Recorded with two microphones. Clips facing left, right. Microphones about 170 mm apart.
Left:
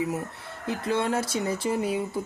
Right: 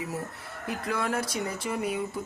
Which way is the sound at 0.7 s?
25° left (ahead or behind).